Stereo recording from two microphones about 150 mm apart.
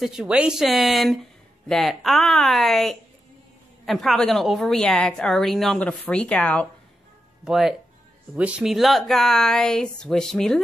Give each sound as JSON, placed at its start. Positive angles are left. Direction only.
{"t": 0.0, "sound": "a woman's voice", "side_deg": -5}
{"t": 7.4, "sound": "a woman's voice", "side_deg": -5}